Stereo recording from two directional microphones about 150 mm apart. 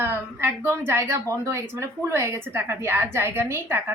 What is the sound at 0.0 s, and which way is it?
Speech, 15° right (ahead or behind).